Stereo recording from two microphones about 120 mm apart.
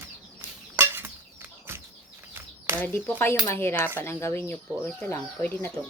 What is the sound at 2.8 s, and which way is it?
Speech, 15° left (ahead or behind).